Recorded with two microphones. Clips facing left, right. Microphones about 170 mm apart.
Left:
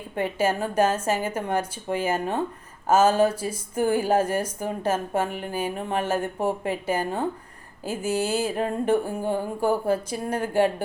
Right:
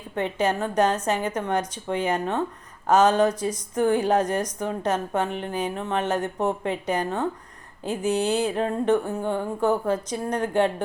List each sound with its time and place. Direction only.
0.2 s speech: 5° left (ahead or behind)